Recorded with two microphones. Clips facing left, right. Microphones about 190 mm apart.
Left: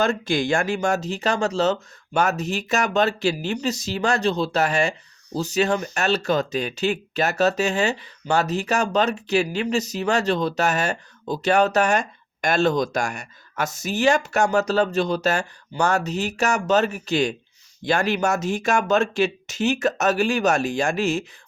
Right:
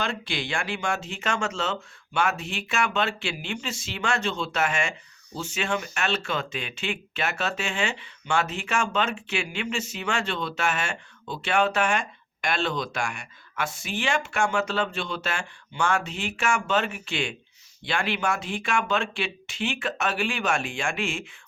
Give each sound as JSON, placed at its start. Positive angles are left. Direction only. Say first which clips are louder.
{"t": 0.0, "sound": "speech", "louder": "left 9 dB", "side_deg": 45}